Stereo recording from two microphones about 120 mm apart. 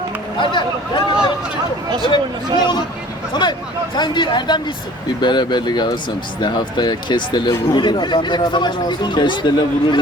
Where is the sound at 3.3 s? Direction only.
40° left (ahead or behind).